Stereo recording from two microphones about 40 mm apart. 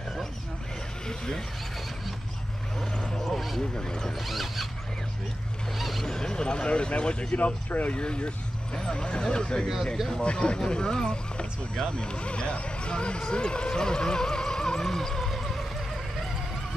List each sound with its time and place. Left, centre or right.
1.0 s speech: centre
3.3 s a sound: centre
3.7 s speech: centre
4.3 s zipper: centre
5.8 s vehicle: centre
6.1 s speech: centre
7.3 s speech: left
8.0 s speech: left
13.3 s music: left; by 15.6 s centre